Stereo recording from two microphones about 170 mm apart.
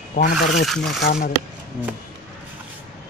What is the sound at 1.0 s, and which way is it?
Speech, 60° left (ahead or behind).